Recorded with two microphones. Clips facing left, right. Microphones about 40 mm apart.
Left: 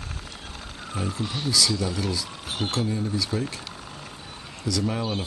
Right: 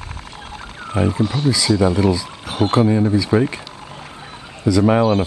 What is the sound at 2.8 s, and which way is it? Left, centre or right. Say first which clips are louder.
Speech: right 11 dB; right.